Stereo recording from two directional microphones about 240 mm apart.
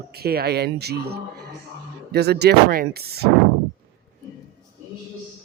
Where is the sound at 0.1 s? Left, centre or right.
Right.